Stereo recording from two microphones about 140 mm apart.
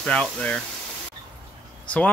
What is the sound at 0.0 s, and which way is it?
Speech, 5° left (ahead or behind).